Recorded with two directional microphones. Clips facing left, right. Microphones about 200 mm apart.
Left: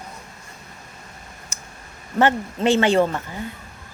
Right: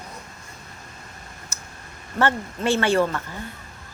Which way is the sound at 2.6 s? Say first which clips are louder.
Left 3 dB; 20° left (ahead or behind).